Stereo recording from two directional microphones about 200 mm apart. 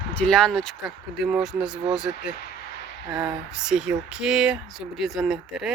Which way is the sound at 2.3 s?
55° left (ahead or behind).